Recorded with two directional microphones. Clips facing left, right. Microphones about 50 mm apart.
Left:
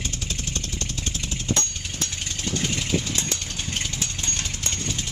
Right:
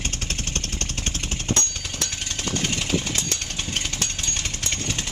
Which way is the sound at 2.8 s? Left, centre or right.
Right.